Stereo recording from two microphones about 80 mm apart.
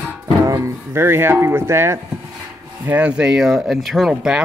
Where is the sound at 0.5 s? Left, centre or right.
Right.